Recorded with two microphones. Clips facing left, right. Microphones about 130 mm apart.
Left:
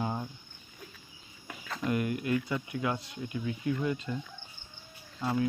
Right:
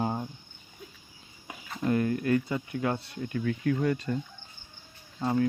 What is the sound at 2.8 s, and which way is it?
Speech, 40° right (ahead or behind).